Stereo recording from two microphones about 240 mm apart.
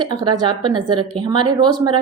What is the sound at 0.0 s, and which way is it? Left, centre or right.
A woman's voice, centre.